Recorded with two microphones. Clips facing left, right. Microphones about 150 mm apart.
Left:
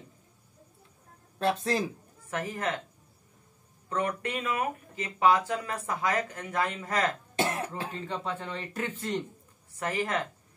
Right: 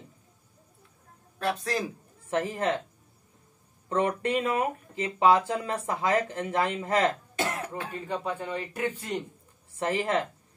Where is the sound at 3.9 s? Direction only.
25° right (ahead or behind).